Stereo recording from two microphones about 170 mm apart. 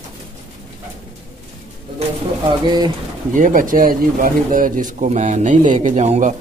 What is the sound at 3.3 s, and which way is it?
Speech, 50° right (ahead or behind).